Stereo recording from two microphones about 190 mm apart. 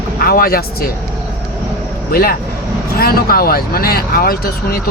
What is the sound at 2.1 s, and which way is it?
Speech, 50° left (ahead or behind).